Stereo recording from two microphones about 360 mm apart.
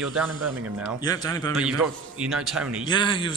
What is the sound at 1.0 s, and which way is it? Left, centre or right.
Speech, centre.